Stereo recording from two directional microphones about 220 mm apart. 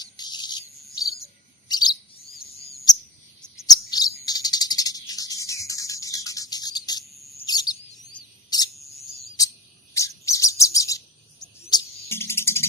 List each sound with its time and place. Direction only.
0.0 s cricket: 20° left (ahead or behind)
1.6 s chirp: 20° left (ahead or behind)
3.8 s cricket: 15° left (ahead or behind)
7.4 s chirp: 15° left (ahead or behind)
9.9 s chirp: 15° left (ahead or behind)
11.6 s bird: 10° left (ahead or behind)